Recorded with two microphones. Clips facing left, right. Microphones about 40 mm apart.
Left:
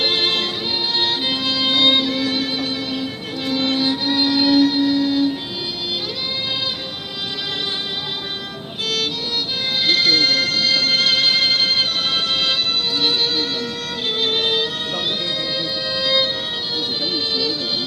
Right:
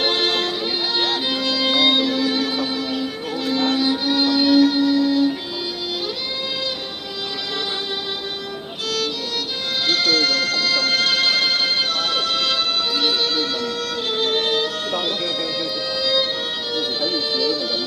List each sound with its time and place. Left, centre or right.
0.0 s music: left
3.4 s music: centre
9.8 s music: left